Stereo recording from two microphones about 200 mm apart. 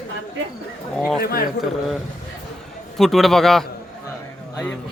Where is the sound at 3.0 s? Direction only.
Centre (ahead or behind).